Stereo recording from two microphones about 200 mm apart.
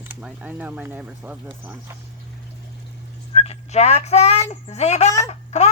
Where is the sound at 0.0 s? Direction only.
10° right (ahead or behind).